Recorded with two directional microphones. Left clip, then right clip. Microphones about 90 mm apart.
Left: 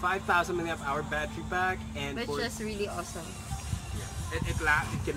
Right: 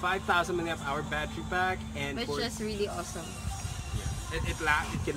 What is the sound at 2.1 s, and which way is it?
Speech, 20° left (ahead or behind).